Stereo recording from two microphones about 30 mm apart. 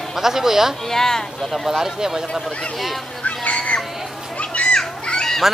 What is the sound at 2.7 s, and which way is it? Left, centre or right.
Speech, centre.